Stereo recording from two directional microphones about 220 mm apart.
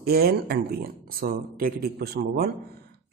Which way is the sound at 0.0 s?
45° right (ahead or behind).